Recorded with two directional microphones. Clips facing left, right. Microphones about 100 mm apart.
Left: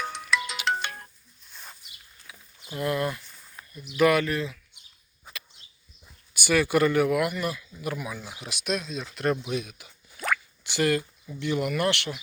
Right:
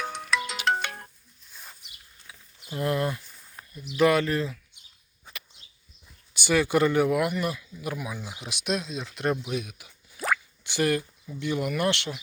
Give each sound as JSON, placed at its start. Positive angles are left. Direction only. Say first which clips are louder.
{"t": 0.1, "sound": "music", "louder": "even", "side_deg": -50}
{"t": 0.5, "sound": "music", "louder": "right 2 dB", "side_deg": -35}
{"t": 2.3, "sound": "a sound", "louder": "left 1 dB", "side_deg": -30}
{"t": 2.7, "sound": "speech", "louder": "right 1 dB", "side_deg": -30}
{"t": 6.3, "sound": "speech", "louder": "even", "side_deg": -20}
{"t": 7.4, "sound": "speech", "louder": "even", "side_deg": -10}
{"t": 10.2, "sound": "drip", "louder": "right 1 dB", "side_deg": -20}
{"t": 11.3, "sound": "speech", "louder": "left 1 dB", "side_deg": -10}